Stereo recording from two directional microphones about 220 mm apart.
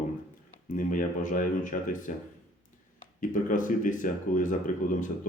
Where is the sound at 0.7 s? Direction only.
35° left (ahead or behind).